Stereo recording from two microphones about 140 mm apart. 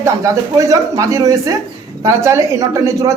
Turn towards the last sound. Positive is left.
turn(degrees=-20)  # may be behind; listen again after turning